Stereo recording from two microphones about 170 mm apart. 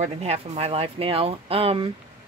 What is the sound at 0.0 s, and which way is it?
Speech, 35° right (ahead or behind).